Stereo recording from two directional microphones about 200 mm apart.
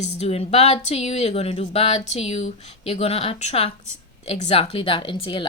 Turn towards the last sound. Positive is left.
turn(degrees=25)  # may be behind; listen again after turning